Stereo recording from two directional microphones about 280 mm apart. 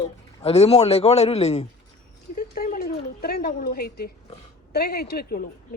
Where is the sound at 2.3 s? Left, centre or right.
Left.